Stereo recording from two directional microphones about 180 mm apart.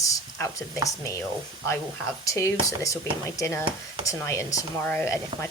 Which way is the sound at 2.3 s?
15° left (ahead or behind).